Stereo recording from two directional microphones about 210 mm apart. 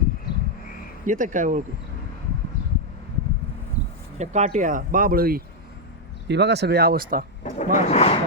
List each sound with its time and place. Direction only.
1.0 s speech: 40° right (ahead or behind)
4.2 s speech: 35° right (ahead or behind)
7.6 s speech: 35° left (ahead or behind)